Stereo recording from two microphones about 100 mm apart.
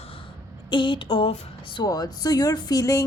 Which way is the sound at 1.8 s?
40° left (ahead or behind).